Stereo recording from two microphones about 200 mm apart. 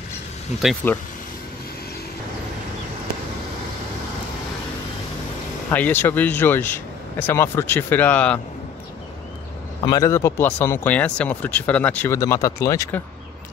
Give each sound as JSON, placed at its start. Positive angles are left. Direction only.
{"t": 0.8, "sound": "speech", "side_deg": 10}
{"t": 5.7, "sound": "speech", "side_deg": 10}
{"t": 9.8, "sound": "speech", "side_deg": 15}